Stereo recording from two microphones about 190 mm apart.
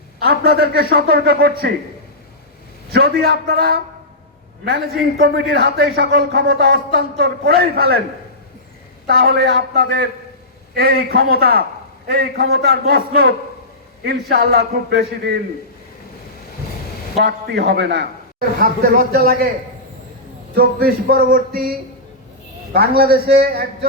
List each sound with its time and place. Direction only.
0.2 s a man's voice: 55° right (ahead or behind)
2.9 s a man's voice: 55° right (ahead or behind)
9.0 s a man's voice: 55° right (ahead or behind)
17.2 s a man's voice: 60° right (ahead or behind)
20.6 s a man's voice: 50° right (ahead or behind)